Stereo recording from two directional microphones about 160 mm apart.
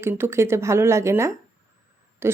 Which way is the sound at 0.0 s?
15° right (ahead or behind).